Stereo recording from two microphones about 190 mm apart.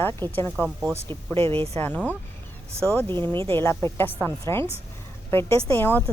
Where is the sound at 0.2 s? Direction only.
10° left (ahead or behind).